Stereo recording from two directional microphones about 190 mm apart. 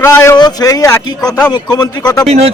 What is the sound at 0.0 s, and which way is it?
A man's voice, 15° left (ahead or behind).